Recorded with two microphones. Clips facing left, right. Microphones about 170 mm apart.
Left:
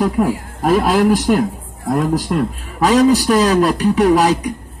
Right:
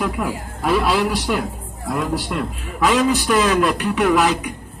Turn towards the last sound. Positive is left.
turn(degrees=40)  # may be behind; listen again after turning